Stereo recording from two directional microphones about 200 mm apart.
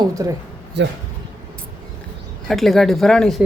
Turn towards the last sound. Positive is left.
turn(degrees=5)  # may be behind; listen again after turning